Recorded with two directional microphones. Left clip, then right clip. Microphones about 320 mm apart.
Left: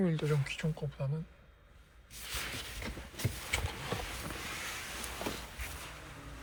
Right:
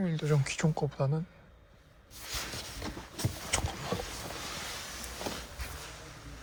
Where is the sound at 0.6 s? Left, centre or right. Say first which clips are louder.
Right 7 dB; right.